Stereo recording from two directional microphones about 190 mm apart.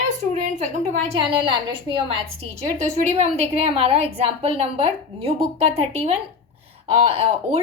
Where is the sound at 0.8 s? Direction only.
30° right (ahead or behind).